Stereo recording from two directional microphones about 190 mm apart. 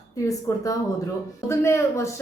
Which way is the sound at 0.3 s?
15° left (ahead or behind).